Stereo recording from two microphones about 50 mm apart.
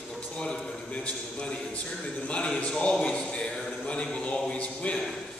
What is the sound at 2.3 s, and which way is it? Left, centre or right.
A man's voice, left.